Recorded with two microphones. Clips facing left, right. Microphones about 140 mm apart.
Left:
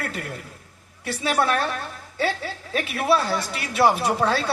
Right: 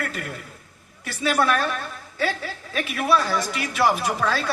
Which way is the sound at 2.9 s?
30° left (ahead or behind).